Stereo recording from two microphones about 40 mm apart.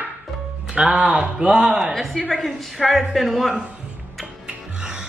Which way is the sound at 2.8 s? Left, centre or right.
Centre.